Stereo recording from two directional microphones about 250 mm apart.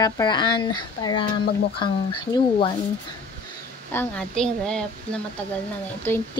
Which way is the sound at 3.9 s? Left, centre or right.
Centre.